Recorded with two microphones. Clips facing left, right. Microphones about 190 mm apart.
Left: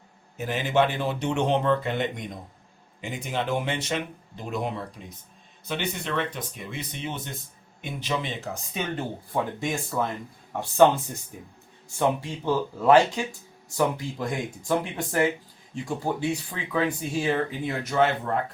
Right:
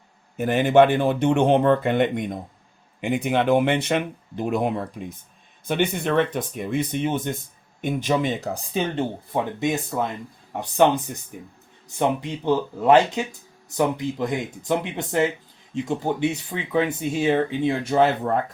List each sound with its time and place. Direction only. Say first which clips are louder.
0.3 s speech: right 8 dB; 55° right (ahead or behind); by 18.1 s 30° right (ahead or behind)